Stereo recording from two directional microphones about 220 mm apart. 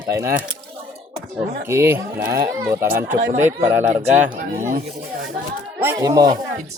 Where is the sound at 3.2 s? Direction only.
35° right (ahead or behind).